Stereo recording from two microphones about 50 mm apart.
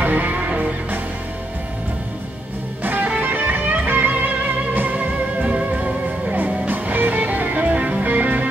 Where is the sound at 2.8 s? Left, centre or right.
Right.